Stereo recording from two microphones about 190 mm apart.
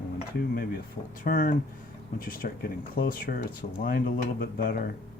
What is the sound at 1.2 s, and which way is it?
Speech, 45° left (ahead or behind).